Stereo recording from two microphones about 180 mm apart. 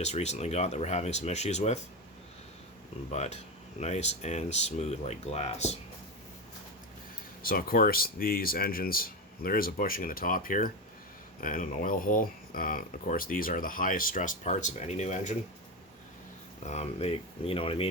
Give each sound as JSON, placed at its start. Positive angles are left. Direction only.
{"t": 0.0, "sound": "speech", "side_deg": 40}
{"t": 3.1, "sound": "speech", "side_deg": 40}
{"t": 7.4, "sound": "speech", "side_deg": 55}
{"t": 16.6, "sound": "speech", "side_deg": 35}